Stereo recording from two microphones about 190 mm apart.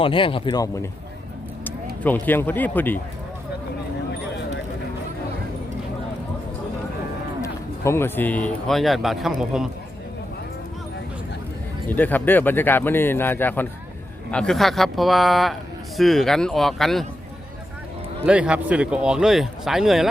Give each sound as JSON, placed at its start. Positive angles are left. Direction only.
{"t": 0.0, "sound": "a man's voice", "side_deg": 30}
{"t": 2.2, "sound": "speech", "side_deg": 10}
{"t": 7.4, "sound": "a man's voice", "side_deg": 15}
{"t": 11.9, "sound": "a man's voice", "side_deg": 10}
{"t": 18.3, "sound": "a man's voice", "side_deg": -5}